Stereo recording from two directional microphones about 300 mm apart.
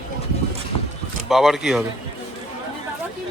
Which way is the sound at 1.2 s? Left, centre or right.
Centre.